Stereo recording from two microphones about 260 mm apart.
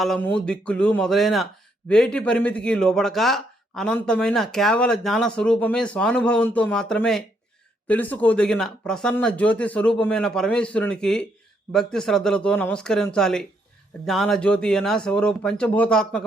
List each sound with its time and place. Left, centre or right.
0.0 s a man's voice: centre